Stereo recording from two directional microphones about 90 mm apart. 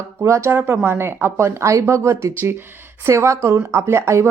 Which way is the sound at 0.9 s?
25° right (ahead or behind).